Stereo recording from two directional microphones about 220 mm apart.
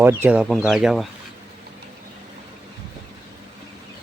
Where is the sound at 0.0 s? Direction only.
10° right (ahead or behind).